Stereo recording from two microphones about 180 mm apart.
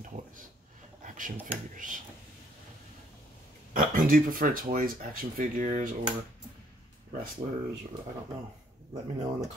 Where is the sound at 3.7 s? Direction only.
50° right (ahead or behind).